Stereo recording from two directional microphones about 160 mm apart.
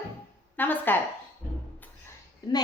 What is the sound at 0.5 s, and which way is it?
Speech, 10° left (ahead or behind).